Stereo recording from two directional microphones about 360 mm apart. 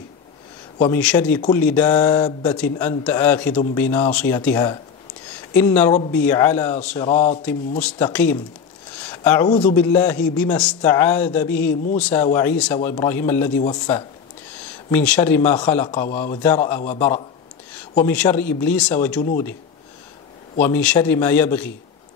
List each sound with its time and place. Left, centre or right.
0.7 s speech: centre
17.9 s speech: centre
20.5 s speech: centre